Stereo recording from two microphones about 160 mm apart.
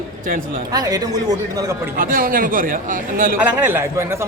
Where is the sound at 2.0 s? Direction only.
60° right (ahead or behind).